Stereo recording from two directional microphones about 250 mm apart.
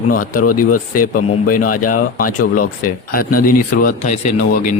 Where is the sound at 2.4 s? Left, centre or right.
Left.